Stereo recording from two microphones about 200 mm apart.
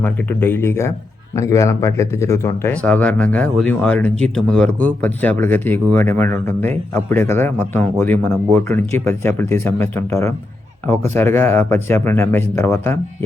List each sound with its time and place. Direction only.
0.0 s speech: 10° left (ahead or behind)